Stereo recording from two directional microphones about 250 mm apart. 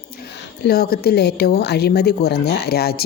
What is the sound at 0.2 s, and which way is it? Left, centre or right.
A woman's voice, left.